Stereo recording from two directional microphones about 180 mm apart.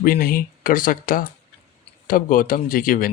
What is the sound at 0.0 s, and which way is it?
Speech, 55° left (ahead or behind).